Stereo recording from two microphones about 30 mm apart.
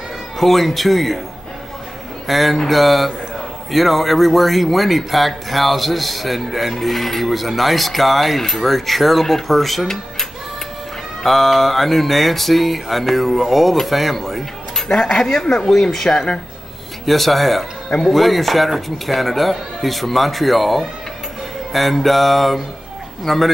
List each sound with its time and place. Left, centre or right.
0.4 s speech: centre
2.2 s speech: centre
11.2 s speech: centre
14.9 s speech: centre
17.0 s speech: centre